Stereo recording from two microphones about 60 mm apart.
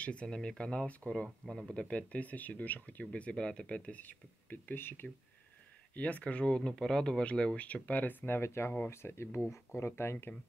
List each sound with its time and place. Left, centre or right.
0.0 s speech: centre; by 5.0 s left
5.9 s speech: left
8.4 s speech: left